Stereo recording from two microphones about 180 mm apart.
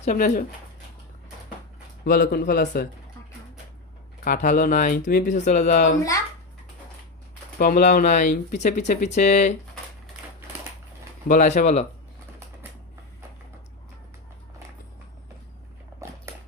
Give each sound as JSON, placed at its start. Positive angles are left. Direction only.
{"t": 0.0, "sound": "speech", "side_deg": 40}
{"t": 2.0, "sound": "speech", "side_deg": 60}
{"t": 4.2, "sound": "speech", "side_deg": 45}
{"t": 7.6, "sound": "speech", "side_deg": 45}
{"t": 11.3, "sound": "speech", "side_deg": 40}